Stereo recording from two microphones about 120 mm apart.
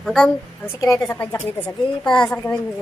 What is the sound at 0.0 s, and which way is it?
Speech, 5° left (ahead or behind).